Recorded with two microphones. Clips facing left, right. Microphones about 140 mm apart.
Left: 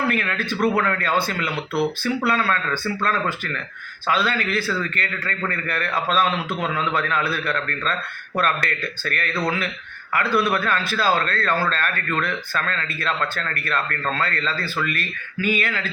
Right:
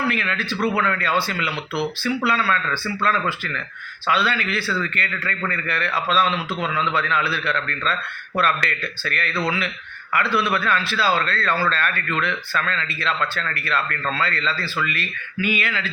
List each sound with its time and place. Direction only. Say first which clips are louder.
0.1 s a man's voice: left 1 dB; 50° left (ahead or behind)